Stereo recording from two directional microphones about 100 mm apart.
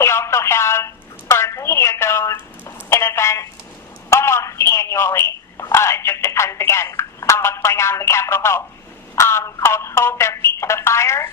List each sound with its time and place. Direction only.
0.0 s telephone: 25° left (ahead or behind)
9.1 s speech: 30° left (ahead or behind)